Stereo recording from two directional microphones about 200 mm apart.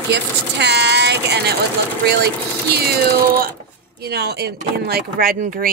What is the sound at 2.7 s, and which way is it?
Speech, 50° right (ahead or behind).